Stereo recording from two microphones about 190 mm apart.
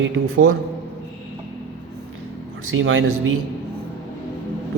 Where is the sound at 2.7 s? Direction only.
90° right.